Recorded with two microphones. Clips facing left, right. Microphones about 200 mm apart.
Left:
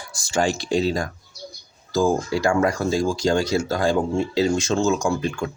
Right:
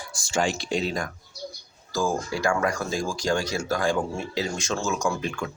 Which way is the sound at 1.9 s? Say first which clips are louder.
Left 6 dB; 20° left (ahead or behind).